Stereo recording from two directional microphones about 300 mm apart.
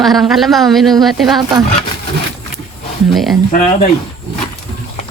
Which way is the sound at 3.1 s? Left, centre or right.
Centre.